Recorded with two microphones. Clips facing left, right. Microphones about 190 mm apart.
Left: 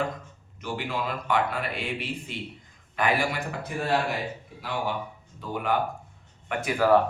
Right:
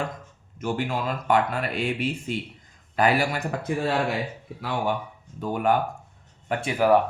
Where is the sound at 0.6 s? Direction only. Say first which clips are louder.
Right 4 dB; 45° right (ahead or behind).